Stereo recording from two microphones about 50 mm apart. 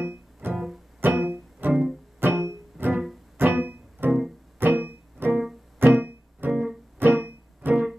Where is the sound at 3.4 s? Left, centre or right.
Right.